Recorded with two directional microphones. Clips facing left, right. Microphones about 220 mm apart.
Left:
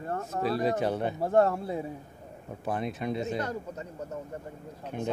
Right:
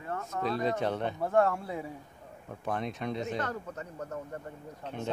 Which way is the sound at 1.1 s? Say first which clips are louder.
Left 3 dB; 35° left (ahead or behind).